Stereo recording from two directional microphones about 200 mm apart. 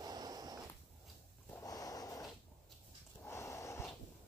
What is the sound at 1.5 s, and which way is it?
Snort, 20° left (ahead or behind).